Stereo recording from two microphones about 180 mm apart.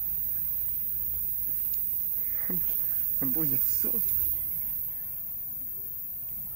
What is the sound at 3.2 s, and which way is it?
Speech, 15° left (ahead or behind).